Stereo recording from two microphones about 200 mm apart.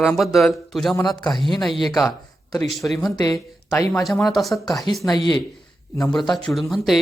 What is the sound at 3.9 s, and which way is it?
Speech, centre (ahead or behind).